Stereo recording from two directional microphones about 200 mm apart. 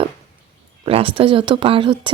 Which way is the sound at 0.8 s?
30° right (ahead or behind).